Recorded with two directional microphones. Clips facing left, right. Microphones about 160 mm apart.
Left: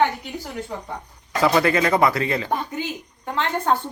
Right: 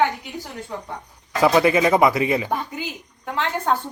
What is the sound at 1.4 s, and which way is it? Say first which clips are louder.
A man's voice: right 2 dB; 15° right (ahead or behind).